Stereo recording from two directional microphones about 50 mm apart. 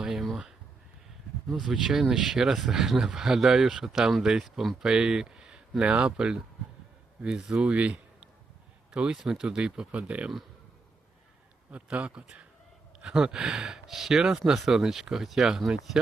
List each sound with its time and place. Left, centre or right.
0.0 s a sound: centre
1.5 s a man's voice: centre
7.5 s speech: right
9.1 s speech: centre
11.7 s a man's voice: right